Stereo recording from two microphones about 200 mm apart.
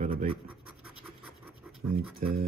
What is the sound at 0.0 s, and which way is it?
Scratch, 40° right (ahead or behind).